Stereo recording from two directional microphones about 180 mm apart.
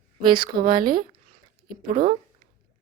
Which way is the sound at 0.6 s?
50° right (ahead or behind).